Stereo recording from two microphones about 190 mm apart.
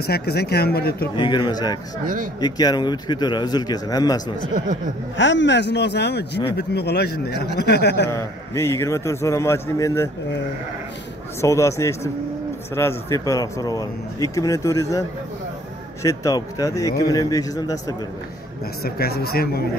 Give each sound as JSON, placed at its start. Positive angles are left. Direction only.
{"t": 0.0, "sound": "a man's voice", "side_deg": 55}
{"t": 1.1, "sound": "a man's voice", "side_deg": 25}
{"t": 5.1, "sound": "a man's voice", "side_deg": 70}
{"t": 8.1, "sound": "speech", "side_deg": 15}
{"t": 11.4, "sound": "a man's voice", "side_deg": 15}
{"t": 18.9, "sound": "a man's voice", "side_deg": 55}